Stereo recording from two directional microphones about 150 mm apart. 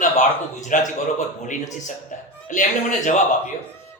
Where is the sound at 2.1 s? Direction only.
55° left (ahead or behind).